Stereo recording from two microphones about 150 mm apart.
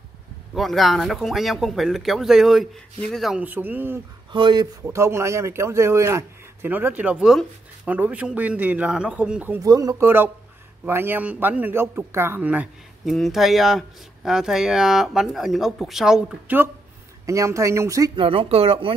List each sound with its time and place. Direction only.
0.6 s speech: centre (ahead or behind)
3.4 s speech: 10° right (ahead or behind)
4.3 s speech: 30° right (ahead or behind)
4.9 s speech: 20° right (ahead or behind)
9.6 s speech: 25° right (ahead or behind)
13.0 s speech: centre (ahead or behind); by 18.1 s 20° right (ahead or behind)
18.1 s speech: 35° right (ahead or behind)